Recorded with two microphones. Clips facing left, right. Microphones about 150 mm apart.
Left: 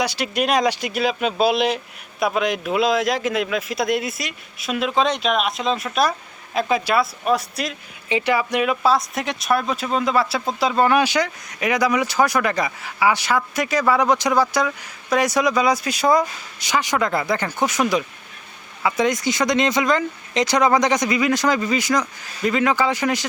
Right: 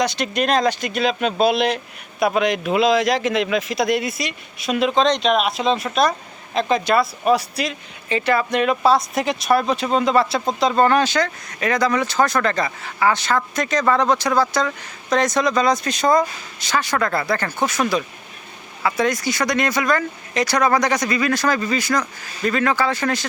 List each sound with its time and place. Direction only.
0.0 s speech: 10° left (ahead or behind)
8.1 s speech: 15° left (ahead or behind)